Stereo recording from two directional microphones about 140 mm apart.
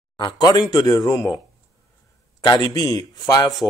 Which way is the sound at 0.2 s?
30° left (ahead or behind).